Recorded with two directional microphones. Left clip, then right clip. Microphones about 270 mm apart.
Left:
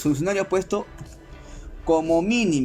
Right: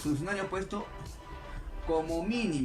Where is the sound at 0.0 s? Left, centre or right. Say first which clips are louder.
Left 10 dB; left.